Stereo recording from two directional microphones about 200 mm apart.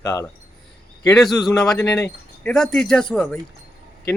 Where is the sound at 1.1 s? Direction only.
Centre (ahead or behind).